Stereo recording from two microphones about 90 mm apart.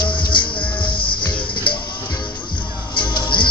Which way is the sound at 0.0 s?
60° left (ahead or behind).